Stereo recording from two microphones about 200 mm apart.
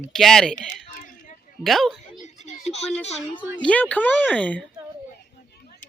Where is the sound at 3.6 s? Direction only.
5° left (ahead or behind).